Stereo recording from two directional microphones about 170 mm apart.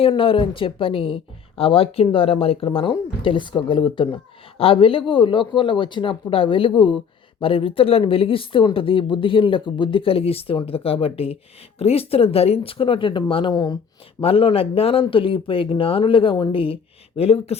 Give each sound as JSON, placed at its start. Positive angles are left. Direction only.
{"t": 0.1, "sound": "a woman's voice", "side_deg": 30}
{"t": 14.2, "sound": "speech", "side_deg": 35}